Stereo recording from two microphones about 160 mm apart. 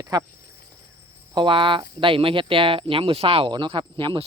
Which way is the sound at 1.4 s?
30° right (ahead or behind).